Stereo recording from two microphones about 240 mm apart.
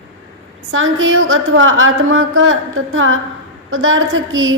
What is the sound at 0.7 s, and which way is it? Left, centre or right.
Speech, right.